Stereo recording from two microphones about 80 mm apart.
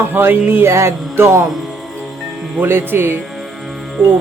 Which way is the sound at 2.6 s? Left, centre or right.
Right.